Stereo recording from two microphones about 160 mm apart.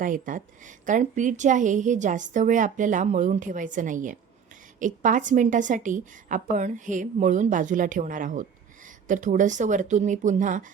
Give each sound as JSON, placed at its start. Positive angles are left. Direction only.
{"t": 0.0, "sound": "a woman's voice", "side_deg": -55}